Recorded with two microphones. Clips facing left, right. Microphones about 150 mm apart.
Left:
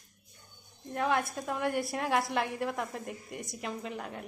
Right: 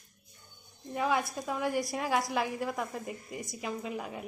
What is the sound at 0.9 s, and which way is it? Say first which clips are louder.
A woman's voice: even; centre (ahead or behind).